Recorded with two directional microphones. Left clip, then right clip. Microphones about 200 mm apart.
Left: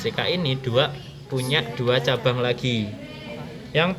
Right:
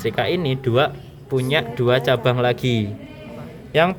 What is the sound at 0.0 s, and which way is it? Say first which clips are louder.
Speech: right 3 dB; 55° right (ahead or behind).